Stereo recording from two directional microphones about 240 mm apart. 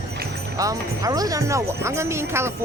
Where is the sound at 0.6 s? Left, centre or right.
Centre.